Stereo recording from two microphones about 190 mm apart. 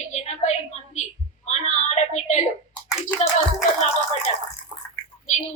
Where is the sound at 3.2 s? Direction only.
35° left (ahead or behind).